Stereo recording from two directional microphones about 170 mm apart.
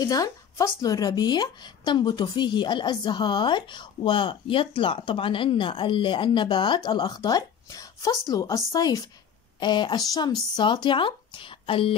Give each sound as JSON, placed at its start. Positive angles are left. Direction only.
{"t": 0.0, "sound": "speech", "side_deg": 20}